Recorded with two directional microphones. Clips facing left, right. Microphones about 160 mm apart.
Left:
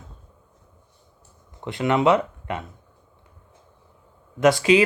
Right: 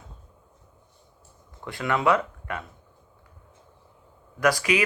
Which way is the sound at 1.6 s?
20° left (ahead or behind).